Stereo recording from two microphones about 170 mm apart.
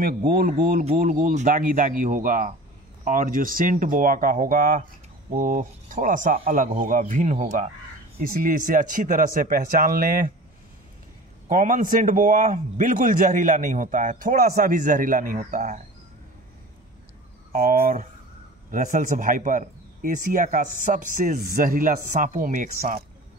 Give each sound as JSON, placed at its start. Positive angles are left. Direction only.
{"t": 0.0, "sound": "a man's voice", "side_deg": -60}
{"t": 11.4, "sound": "a man's voice", "side_deg": -50}
{"t": 17.5, "sound": "a man's voice", "side_deg": -60}